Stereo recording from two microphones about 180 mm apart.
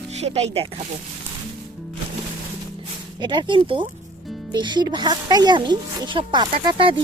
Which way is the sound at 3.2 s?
25° right (ahead or behind).